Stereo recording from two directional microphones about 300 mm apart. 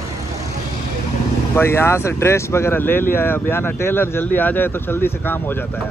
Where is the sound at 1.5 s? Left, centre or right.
Centre.